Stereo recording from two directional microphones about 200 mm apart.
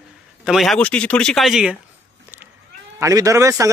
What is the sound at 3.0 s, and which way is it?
Speech, 15° right (ahead or behind).